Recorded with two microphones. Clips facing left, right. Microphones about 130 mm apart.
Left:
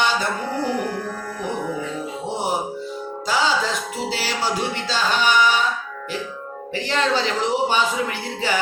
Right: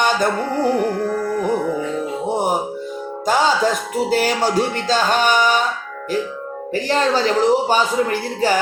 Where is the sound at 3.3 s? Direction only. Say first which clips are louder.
Right 5 dB; 50° right (ahead or behind).